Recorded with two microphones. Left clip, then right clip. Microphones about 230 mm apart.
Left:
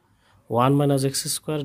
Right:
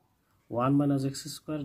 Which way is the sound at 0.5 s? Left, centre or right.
Left.